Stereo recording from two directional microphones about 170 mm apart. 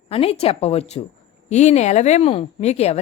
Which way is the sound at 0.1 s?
35° left (ahead or behind).